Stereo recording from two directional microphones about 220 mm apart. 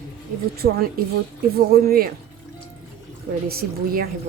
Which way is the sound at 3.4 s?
45° right (ahead or behind).